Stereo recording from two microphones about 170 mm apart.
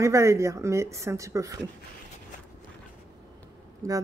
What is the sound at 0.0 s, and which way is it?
Speech, 15° right (ahead or behind).